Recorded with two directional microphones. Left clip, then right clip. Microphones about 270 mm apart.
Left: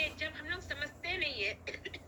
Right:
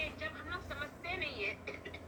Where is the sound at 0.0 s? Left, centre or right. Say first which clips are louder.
Left 4 dB; left.